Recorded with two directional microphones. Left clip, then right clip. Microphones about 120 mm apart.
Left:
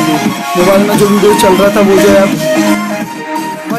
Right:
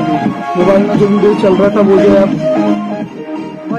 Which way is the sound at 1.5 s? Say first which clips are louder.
Left 2 dB; 35° left (ahead or behind).